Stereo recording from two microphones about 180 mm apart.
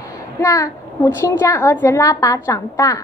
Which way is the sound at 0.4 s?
15° left (ahead or behind).